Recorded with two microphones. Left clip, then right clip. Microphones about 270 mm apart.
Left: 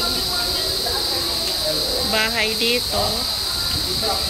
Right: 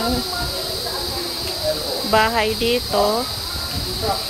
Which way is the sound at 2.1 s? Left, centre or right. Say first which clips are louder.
Right 5 dB; centre.